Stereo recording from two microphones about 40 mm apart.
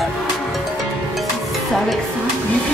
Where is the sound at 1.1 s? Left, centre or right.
Centre.